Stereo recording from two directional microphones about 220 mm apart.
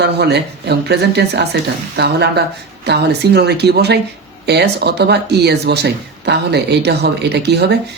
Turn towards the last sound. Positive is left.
turn(degrees=-50)  # may be behind; listen again after turning